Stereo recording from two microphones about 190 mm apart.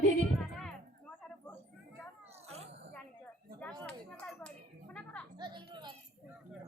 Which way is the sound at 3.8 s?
5° left (ahead or behind).